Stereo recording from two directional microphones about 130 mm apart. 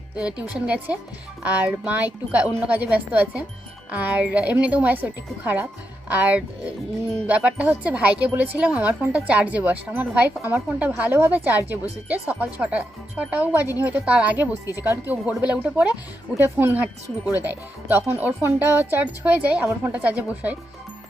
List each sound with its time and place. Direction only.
0.2 s speech: 10° right (ahead or behind)